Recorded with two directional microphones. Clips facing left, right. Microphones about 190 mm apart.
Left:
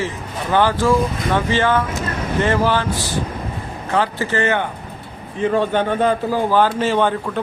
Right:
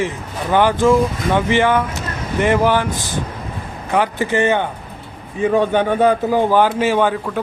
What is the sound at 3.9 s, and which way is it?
Speech, 15° right (ahead or behind).